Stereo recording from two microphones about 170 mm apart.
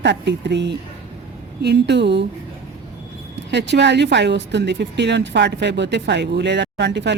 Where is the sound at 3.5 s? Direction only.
90° right.